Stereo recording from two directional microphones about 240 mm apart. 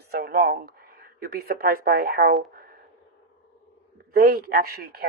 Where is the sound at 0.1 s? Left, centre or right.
Right.